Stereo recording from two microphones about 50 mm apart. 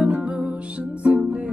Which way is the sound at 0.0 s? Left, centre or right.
Right.